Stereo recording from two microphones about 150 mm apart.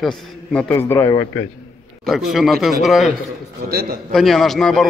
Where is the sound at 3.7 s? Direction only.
90° right.